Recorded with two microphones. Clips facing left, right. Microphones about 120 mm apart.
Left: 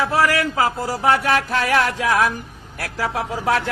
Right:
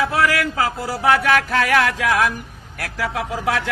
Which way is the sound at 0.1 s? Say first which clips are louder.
Left 1 dB; 30° left (ahead or behind).